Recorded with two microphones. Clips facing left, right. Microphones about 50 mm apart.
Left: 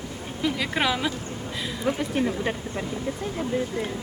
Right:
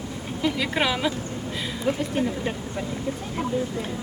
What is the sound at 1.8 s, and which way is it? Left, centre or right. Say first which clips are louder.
Speech: even; left.